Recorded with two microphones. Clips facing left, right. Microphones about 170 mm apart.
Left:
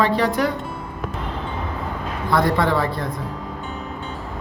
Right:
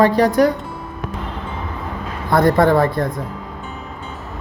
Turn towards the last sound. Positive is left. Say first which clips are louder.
# right 6 dB
turn(degrees=-50)  # may be behind; listen again after turning